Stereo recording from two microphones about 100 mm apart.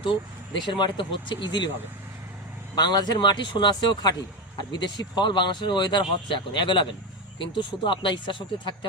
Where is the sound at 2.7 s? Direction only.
45° left (ahead or behind).